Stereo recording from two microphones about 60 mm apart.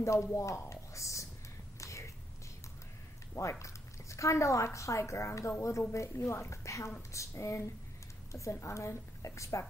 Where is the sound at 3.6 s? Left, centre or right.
Left.